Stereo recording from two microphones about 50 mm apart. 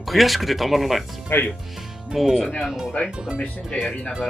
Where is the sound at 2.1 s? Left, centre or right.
Centre.